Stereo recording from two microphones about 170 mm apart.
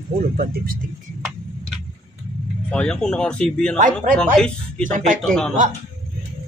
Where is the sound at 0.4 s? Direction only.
55° right (ahead or behind).